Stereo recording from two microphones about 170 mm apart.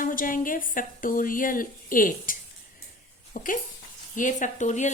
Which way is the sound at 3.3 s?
50° left (ahead or behind).